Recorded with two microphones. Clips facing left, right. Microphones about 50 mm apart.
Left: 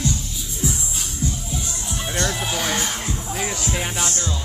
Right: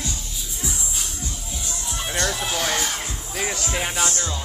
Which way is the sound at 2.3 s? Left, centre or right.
Centre.